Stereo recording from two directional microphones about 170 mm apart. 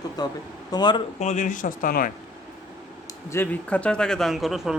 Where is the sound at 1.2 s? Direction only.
45° left (ahead or behind).